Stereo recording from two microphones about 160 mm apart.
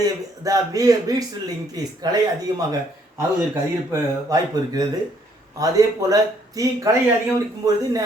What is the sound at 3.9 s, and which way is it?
Speech, 20° right (ahead or behind).